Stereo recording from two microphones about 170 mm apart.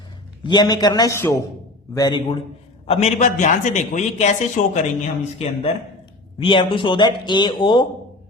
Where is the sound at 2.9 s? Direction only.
40° left (ahead or behind).